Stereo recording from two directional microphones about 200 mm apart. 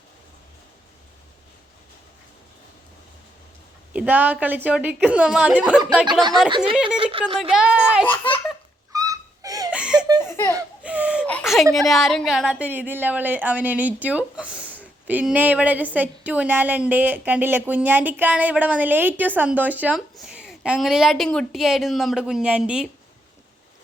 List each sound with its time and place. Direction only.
3.9 s a woman's voice: 10° right (ahead or behind)
7.0 s speech: 25° right (ahead or behind)
7.5 s speech: 5° right (ahead or behind)
8.1 s a child's voice: 25° left (ahead or behind)
8.9 s a sound: 15° right (ahead or behind)
9.7 s laughter: 5° right (ahead or behind)
10.2 s giggle: 10° left (ahead or behind)
10.8 s a sound: 5° right (ahead or behind)
11.3 s a woman's voice: 5° left (ahead or behind)